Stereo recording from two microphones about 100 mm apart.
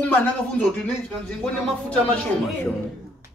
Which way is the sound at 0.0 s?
15° left (ahead or behind).